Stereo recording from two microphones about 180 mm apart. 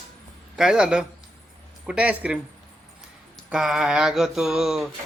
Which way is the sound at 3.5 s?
Centre (ahead or behind).